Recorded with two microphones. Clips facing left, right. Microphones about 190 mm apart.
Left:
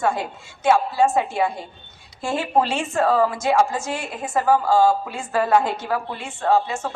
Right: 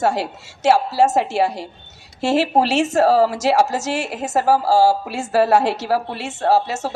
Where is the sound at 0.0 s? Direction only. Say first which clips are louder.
Right 3 dB; 80° right.